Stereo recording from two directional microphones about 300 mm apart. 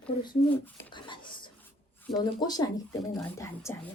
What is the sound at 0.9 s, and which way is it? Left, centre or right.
Speech, centre.